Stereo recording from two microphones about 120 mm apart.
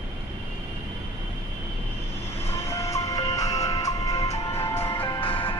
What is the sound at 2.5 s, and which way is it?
Music, 25° left (ahead or behind).